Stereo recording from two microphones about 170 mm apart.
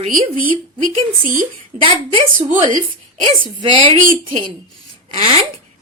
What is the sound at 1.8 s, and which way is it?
A woman's voice, 30° right (ahead or behind).